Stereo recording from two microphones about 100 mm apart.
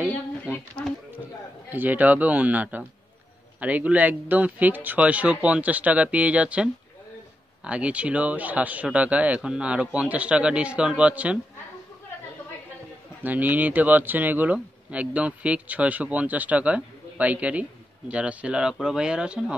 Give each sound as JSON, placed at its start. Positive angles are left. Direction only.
{"t": 1.7, "sound": "speech", "side_deg": -20}
{"t": 13.2, "sound": "speech", "side_deg": -20}